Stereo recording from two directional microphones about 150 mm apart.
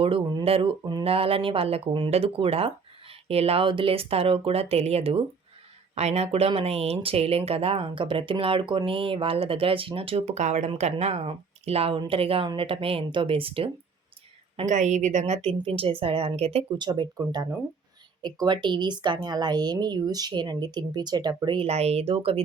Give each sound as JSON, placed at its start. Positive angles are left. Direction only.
{"t": 0.0, "sound": "speech", "side_deg": -30}
{"t": 14.5, "sound": "speech", "side_deg": -50}